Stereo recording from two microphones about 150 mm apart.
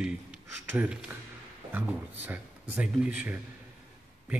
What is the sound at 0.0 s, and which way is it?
Speech, 10° right (ahead or behind).